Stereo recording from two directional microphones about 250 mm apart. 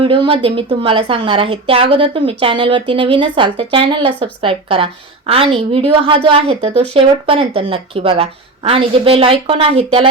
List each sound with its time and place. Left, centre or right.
0.0 s speech: right